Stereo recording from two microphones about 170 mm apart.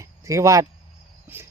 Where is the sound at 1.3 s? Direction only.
10° right (ahead or behind).